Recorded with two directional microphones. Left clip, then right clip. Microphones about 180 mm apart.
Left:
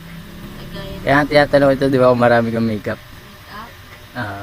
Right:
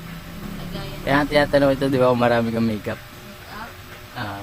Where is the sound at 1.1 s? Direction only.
20° left (ahead or behind).